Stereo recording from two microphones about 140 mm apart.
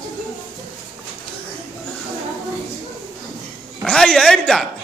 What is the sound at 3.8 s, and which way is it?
Speech, 5° left (ahead or behind).